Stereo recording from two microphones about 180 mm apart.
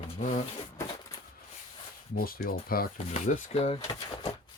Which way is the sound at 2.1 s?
55° left (ahead or behind).